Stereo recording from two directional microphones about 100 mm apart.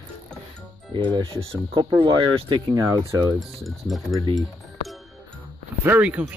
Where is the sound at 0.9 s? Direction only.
55° right (ahead or behind).